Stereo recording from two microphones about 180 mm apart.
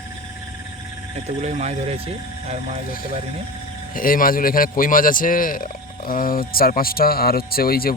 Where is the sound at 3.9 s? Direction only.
50° left (ahead or behind).